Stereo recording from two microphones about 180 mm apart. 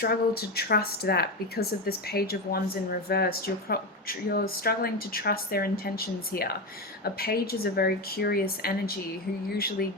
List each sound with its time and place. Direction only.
0.0 s speech: 60° left (ahead or behind)